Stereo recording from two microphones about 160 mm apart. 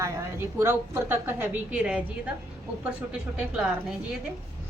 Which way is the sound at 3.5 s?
Centre (ahead or behind).